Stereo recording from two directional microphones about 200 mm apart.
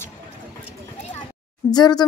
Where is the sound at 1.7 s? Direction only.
20° left (ahead or behind).